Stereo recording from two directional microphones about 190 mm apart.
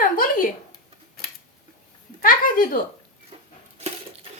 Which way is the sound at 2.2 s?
45° left (ahead or behind).